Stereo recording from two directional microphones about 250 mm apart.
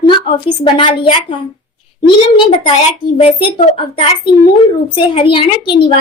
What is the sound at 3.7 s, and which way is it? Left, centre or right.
A woman's voice, left.